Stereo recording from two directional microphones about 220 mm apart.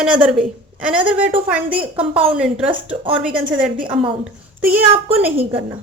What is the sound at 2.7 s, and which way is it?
Speech, 20° right (ahead or behind).